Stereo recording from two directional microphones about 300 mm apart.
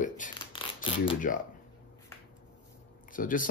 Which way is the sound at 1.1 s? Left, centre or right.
Left.